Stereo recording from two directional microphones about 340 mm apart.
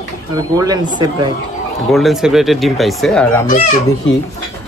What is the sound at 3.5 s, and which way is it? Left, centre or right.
Speech, left.